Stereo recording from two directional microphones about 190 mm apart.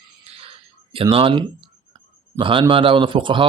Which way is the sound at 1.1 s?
25° right (ahead or behind).